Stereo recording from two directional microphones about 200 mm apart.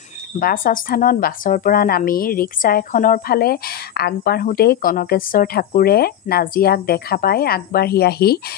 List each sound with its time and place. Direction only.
0.4 s a woman's voice: 45° left (ahead or behind)